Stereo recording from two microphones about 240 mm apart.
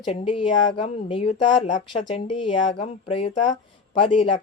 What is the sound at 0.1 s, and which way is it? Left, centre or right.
Speech, left.